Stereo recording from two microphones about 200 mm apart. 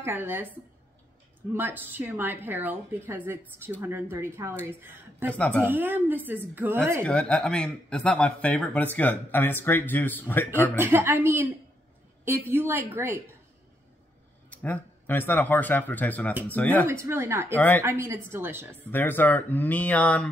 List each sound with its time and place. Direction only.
0.0 s a woman's voice: 10° right (ahead or behind)
1.5 s a woman's voice: 10° right (ahead or behind)
5.3 s speech: 5° left (ahead or behind)
5.6 s a woman's voice: 10° right (ahead or behind)
7.0 s speech: 5° left (ahead or behind)
10.8 s a woman's voice: 10° right (ahead or behind)
14.5 s speech: 10° left (ahead or behind)
16.8 s a woman's voice: 15° right (ahead or behind)
17.6 s speech: 10° left (ahead or behind)
17.8 s a woman's voice: 10° right (ahead or behind)
18.9 s speech: 10° left (ahead or behind)